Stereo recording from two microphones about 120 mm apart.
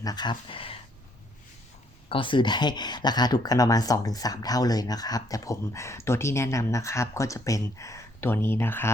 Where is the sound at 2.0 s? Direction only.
45° left (ahead or behind).